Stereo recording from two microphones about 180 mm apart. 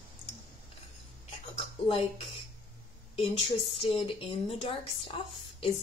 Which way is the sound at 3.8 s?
30° left (ahead or behind).